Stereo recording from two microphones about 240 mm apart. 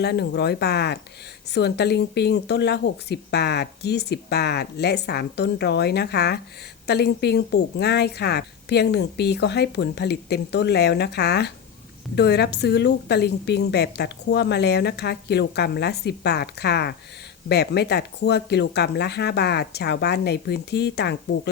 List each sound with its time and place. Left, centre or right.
0.0 s speech: left